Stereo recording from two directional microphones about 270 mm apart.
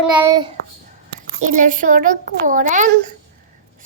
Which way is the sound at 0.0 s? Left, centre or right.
Centre.